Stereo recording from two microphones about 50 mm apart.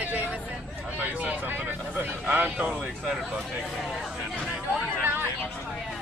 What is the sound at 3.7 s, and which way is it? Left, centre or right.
Speech, centre.